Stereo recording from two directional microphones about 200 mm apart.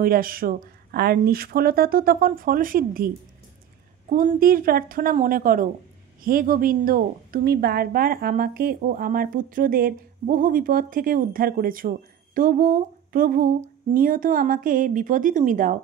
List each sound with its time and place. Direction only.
0.0 s a woman's voice: 45° right (ahead or behind)
4.1 s a woman's voice: 45° right (ahead or behind)